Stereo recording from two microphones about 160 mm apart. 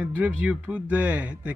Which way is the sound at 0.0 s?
10° right (ahead or behind).